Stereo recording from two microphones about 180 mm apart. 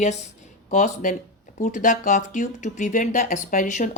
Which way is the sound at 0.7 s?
45° left (ahead or behind).